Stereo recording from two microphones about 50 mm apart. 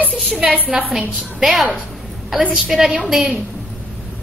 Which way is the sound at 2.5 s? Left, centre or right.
Centre.